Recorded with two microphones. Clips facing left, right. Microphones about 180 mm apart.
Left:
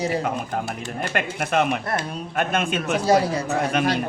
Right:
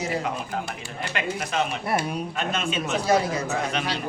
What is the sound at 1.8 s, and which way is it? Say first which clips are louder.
Speech: right 1 dB; 10° right (ahead or behind).